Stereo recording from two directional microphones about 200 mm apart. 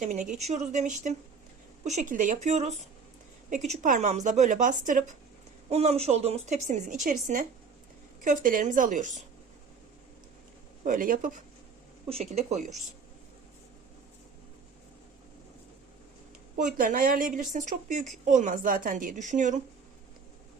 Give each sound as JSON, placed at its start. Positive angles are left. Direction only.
{"t": 0.0, "sound": "a woman's voice", "side_deg": -35}
{"t": 10.8, "sound": "a woman's voice", "side_deg": -45}
{"t": 12.0, "sound": "a woman's voice", "side_deg": -30}
{"t": 16.6, "sound": "a woman's voice", "side_deg": -40}